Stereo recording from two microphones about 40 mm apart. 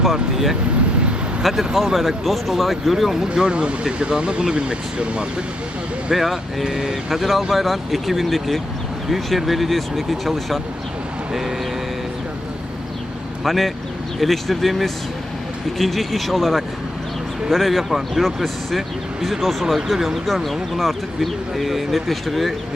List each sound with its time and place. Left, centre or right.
0.0 s speech: centre
3.2 s speech: right
6.1 s speech: centre
6.7 s speech: centre
7.1 s speech: centre
13.4 s speech: centre